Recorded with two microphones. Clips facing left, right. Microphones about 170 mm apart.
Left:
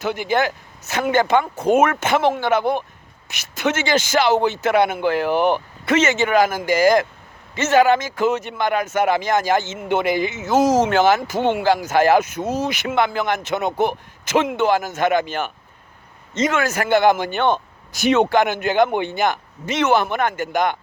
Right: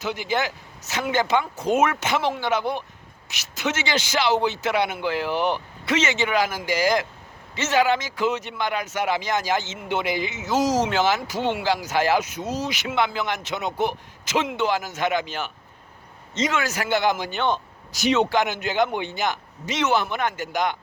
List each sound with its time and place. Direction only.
0.0 s speech: 55° left (ahead or behind)